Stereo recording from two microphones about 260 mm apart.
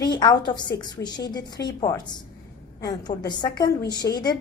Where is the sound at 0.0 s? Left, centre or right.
Centre.